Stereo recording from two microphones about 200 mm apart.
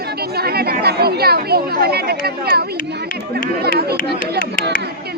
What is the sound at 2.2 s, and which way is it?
Speech, 50° right (ahead or behind).